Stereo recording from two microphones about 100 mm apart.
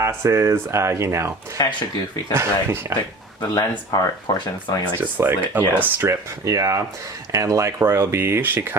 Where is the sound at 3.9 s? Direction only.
50° left (ahead or behind).